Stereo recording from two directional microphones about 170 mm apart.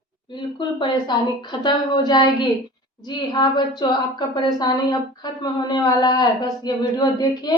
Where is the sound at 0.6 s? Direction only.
25° left (ahead or behind).